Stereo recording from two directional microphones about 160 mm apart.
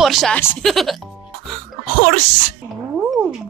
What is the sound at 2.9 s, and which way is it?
Cat, 5° right (ahead or behind).